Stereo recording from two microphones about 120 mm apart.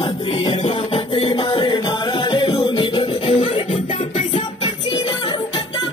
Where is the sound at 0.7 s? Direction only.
55° left (ahead or behind).